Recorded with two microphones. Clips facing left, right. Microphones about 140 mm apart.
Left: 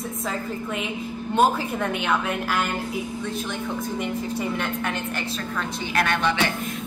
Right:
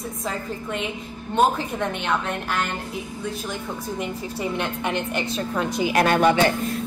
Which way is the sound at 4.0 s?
Centre (ahead or behind).